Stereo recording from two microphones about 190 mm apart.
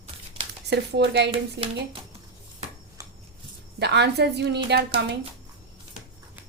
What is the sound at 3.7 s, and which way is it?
Speech, 60° right (ahead or behind).